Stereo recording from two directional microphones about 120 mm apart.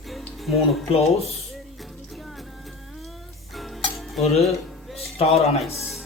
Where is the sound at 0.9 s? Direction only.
60° left (ahead or behind).